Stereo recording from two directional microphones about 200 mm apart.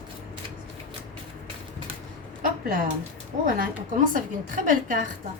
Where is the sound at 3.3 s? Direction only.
40° right (ahead or behind).